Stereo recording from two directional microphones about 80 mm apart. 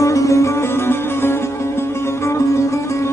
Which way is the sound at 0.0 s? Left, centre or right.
Left.